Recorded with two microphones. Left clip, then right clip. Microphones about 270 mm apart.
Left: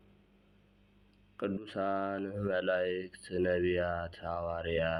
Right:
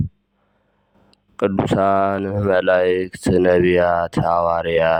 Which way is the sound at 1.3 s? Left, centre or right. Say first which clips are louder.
Right 18 dB; right.